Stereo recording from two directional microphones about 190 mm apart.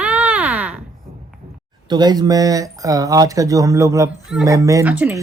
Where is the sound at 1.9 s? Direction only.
20° right (ahead or behind).